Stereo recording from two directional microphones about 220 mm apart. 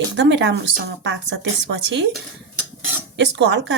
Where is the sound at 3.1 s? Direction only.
55° right (ahead or behind).